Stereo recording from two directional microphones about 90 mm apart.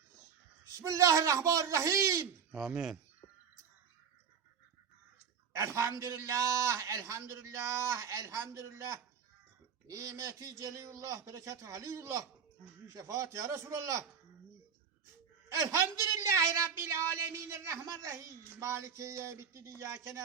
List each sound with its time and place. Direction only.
0.8 s a man's voice: 35° right (ahead or behind)
2.6 s speech: 10° right (ahead or behind)
5.5 s a man's voice: 35° right (ahead or behind)
15.5 s a man's voice: 30° right (ahead or behind)